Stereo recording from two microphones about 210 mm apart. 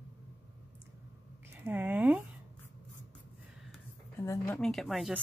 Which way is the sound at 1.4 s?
10° right (ahead or behind).